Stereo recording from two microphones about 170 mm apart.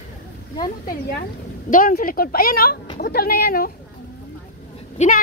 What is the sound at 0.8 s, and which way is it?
A woman's voice, 65° left (ahead or behind).